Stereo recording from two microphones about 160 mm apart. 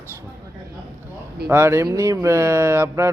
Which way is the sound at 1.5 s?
15° right (ahead or behind).